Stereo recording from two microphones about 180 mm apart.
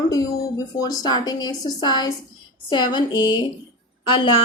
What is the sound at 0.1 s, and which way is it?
A woman's voice, 20° left (ahead or behind).